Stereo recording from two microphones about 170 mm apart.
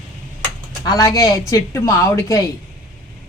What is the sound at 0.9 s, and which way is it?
A woman's voice, 20° left (ahead or behind).